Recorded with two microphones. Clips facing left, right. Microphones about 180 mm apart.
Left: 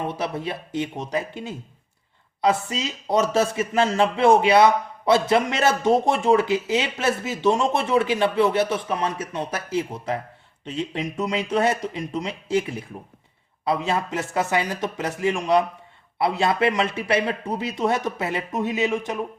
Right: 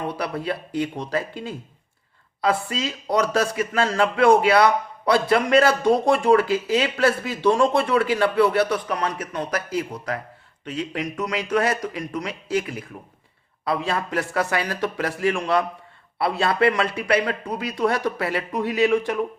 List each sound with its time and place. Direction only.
0.1 s speech: 20° left (ahead or behind)